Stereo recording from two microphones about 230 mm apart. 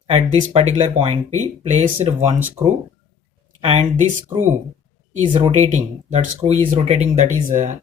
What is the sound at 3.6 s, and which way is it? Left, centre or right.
Speech, right.